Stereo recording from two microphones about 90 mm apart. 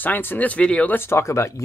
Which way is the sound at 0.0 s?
20° left (ahead or behind).